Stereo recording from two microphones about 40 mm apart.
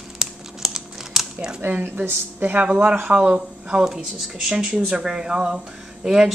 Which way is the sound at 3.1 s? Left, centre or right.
Right.